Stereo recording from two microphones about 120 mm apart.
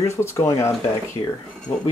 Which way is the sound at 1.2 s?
35° left (ahead or behind).